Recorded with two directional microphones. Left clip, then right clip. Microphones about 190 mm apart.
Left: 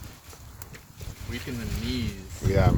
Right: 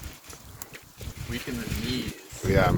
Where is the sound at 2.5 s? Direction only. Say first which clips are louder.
Right 2 dB; centre (ahead or behind).